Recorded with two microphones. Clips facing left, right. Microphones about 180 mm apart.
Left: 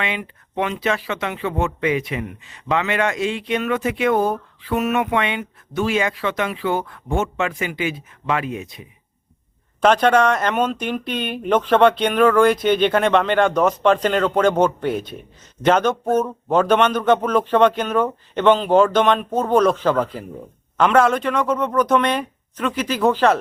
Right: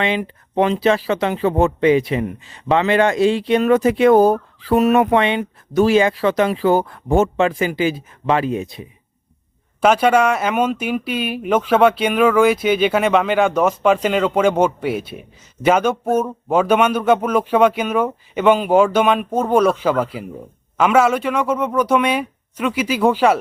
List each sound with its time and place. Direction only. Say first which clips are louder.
0.0 s speech: right 6 dB; 35° right (ahead or behind)
9.8 s speech: right 1 dB; 10° right (ahead or behind)